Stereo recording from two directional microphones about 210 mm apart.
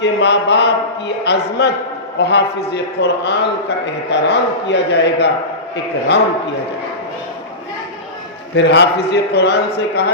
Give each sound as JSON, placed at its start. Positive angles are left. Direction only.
{"t": 0.0, "sound": "a man's voice", "side_deg": 55}
{"t": 8.5, "sound": "a man's voice", "side_deg": 55}